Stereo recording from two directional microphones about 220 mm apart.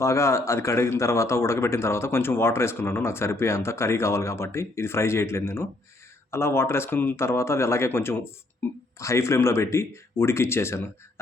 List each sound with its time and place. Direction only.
0.0 s speech: 10° left (ahead or behind)